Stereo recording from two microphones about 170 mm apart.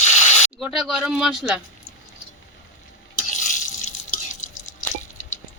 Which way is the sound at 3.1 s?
50° left (ahead or behind).